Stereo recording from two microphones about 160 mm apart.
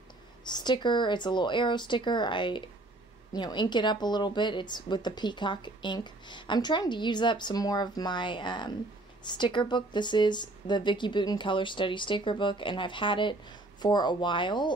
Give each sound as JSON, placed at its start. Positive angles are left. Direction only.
{"t": 0.5, "sound": "speech", "side_deg": 25}